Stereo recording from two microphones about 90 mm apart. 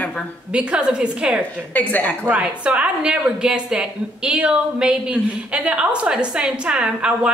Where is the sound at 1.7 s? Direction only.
20° left (ahead or behind).